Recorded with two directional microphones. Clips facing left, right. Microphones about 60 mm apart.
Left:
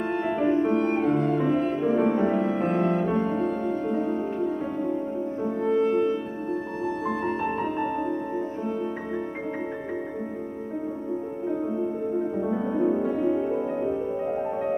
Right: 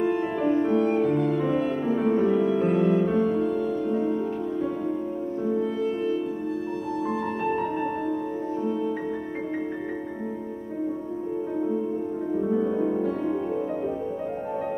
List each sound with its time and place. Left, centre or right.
0.5 s music: left
5.7 s french horn: left
12.4 s music: centre